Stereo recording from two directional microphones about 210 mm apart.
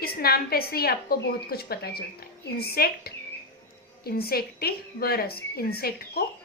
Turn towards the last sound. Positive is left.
turn(degrees=45)  # may be behind; listen again after turning